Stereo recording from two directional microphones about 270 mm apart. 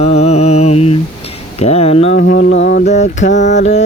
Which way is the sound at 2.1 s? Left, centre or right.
Left.